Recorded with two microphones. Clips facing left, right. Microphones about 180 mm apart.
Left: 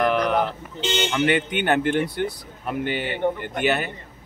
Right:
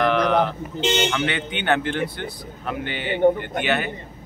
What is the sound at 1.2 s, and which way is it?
Speech, 45° left (ahead or behind).